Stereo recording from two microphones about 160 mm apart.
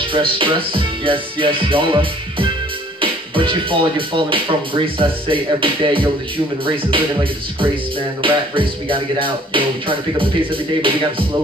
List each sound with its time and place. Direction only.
0.1 s speech: 35° right (ahead or behind)